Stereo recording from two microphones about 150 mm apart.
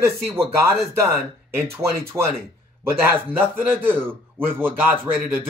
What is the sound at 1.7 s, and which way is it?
Speech, 20° right (ahead or behind).